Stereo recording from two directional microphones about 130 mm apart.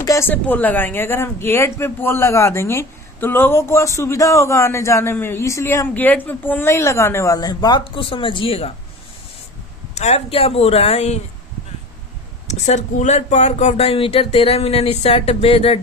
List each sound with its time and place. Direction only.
0.0 s a sound: 25° left (ahead or behind)
0.3 s speech: 15° left (ahead or behind)
7.3 s speech: 30° left (ahead or behind); by 8.7 s 45° left (ahead or behind)
10.0 s speech: 50° left (ahead or behind)
12.5 s speech: 65° left (ahead or behind)